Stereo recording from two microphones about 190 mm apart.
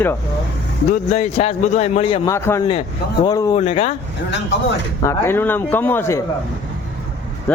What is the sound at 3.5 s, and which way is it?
Speech, 35° left (ahead or behind).